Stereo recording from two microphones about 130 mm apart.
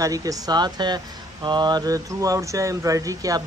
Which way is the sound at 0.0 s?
25° right (ahead or behind).